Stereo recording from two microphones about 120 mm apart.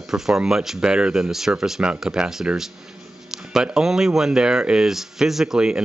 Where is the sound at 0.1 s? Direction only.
5° right (ahead or behind).